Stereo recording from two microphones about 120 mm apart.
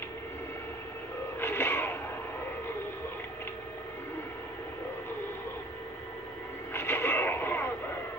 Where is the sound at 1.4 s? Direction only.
20° left (ahead or behind).